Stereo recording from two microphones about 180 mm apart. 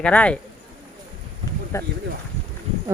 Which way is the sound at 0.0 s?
5° left (ahead or behind).